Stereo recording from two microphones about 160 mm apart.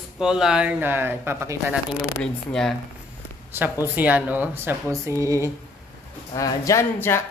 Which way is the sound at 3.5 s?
10° right (ahead or behind).